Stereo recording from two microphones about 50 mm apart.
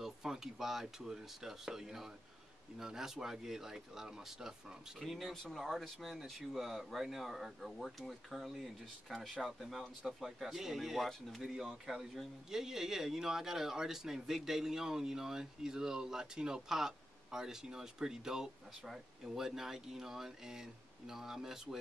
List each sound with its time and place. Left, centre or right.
0.0 s speech: centre
11.1 s speech: centre
11.6 s speech: centre